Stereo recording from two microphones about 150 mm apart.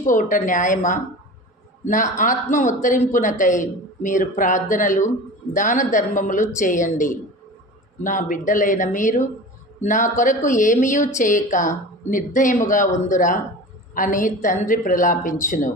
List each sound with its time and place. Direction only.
0.0 s speech: 60° left (ahead or behind)